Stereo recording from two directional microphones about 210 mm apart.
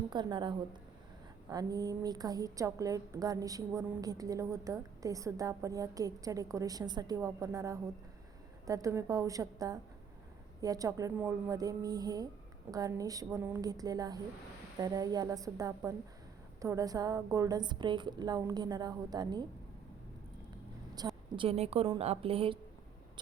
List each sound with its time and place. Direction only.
0.1 s a woman's voice: 20° right (ahead or behind)
21.3 s a woman's voice: 30° right (ahead or behind)